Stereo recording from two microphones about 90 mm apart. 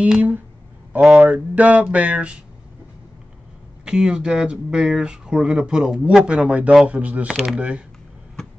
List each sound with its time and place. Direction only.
0.0 s speech: 15° right (ahead or behind)
3.8 s speech: 10° right (ahead or behind)